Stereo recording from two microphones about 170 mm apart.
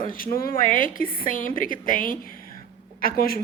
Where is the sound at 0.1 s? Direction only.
60° left (ahead or behind).